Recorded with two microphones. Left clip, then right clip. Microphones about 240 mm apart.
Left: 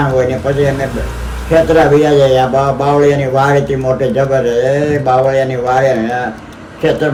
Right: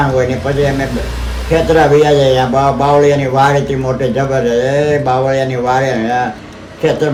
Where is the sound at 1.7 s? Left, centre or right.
Centre.